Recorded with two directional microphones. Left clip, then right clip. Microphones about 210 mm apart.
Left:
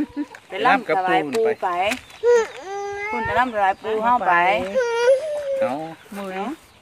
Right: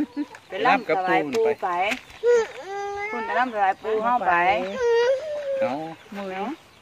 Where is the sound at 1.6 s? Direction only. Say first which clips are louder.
Left 2 dB; 45° left (ahead or behind).